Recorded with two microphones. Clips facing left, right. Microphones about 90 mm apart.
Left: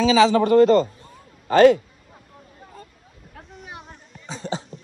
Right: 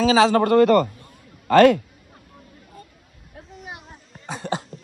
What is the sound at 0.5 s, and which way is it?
A man's voice, 65° right (ahead or behind).